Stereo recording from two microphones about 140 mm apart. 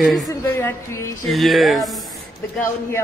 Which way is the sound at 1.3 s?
Centre (ahead or behind).